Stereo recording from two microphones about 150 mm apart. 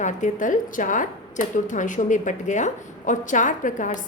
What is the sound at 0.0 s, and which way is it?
A woman's voice, 55° left (ahead or behind).